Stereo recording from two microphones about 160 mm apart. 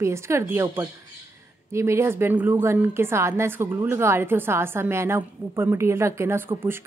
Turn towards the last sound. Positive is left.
turn(degrees=-15)  # may be behind; listen again after turning